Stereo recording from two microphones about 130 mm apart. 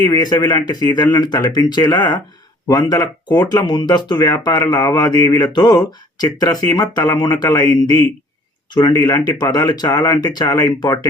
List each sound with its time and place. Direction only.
0.0 s speech: 30° left (ahead or behind)
8.7 s speech: 25° left (ahead or behind)